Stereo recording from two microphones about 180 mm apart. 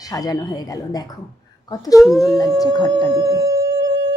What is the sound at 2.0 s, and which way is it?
Speech, centre (ahead or behind).